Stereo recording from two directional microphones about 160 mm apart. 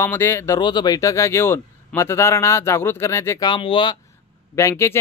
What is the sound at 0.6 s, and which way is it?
Speech, 25° left (ahead or behind).